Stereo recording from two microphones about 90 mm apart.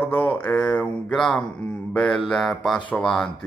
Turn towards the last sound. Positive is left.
turn(degrees=5)  # may be behind; listen again after turning